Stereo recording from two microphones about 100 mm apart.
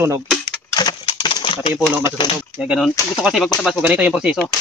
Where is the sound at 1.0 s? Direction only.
55° left (ahead or behind).